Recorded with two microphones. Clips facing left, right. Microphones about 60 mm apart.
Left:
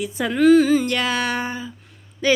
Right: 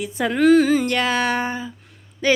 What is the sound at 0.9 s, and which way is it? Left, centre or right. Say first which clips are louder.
Speech: right 2 dB; right.